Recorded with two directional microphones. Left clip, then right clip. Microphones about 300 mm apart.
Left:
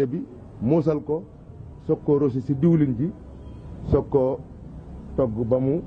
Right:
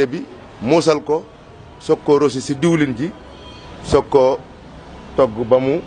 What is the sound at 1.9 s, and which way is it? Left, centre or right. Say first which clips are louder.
Speech: right 7 dB; right.